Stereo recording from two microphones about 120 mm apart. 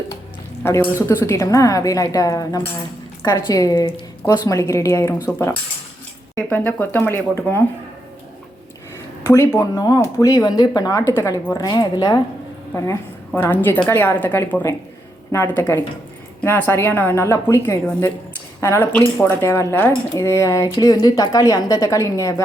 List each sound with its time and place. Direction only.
0.6 s a woman's voice: 20° left (ahead or behind)
6.5 s a woman's voice: 15° left (ahead or behind)
9.2 s a woman's voice: 20° left (ahead or behind)
11.5 s a woman's voice: 35° left (ahead or behind)